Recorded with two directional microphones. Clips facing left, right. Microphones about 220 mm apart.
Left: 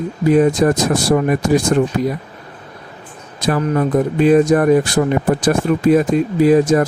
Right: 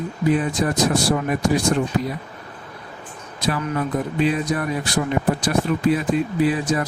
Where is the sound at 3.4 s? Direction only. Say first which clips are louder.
Left 7 dB; 45° left (ahead or behind).